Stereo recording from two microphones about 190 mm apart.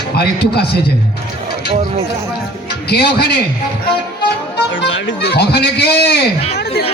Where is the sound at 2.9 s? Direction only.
60° left (ahead or behind).